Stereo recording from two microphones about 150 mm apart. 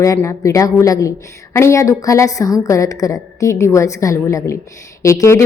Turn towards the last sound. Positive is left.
turn(degrees=20)  # may be behind; listen again after turning